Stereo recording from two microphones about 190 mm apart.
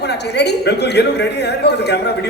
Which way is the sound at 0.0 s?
60° left (ahead or behind).